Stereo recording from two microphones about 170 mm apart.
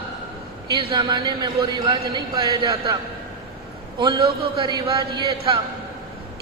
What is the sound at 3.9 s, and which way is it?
A man's voice, 25° right (ahead or behind).